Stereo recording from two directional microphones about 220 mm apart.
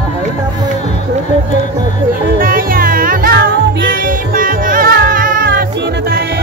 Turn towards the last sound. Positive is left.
turn(degrees=-40)  # may be behind; listen again after turning